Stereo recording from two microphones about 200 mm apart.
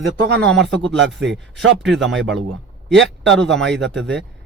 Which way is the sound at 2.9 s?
60° right (ahead or behind).